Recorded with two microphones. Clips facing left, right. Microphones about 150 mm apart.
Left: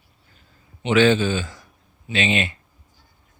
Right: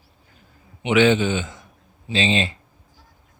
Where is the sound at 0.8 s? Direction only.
15° right (ahead or behind).